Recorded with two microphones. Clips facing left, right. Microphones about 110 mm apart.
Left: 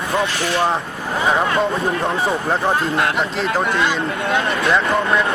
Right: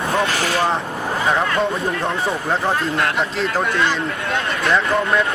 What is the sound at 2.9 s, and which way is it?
Speech, 25° left (ahead or behind).